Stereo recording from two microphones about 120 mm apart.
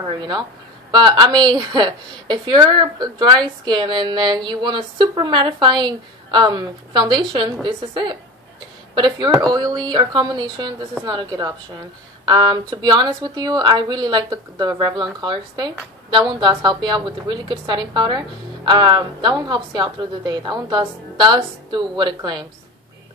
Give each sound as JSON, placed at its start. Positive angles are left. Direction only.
{"t": 0.2, "sound": "a woman's voice", "side_deg": -35}